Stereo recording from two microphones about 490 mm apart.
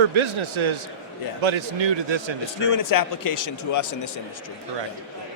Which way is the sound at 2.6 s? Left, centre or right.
Left.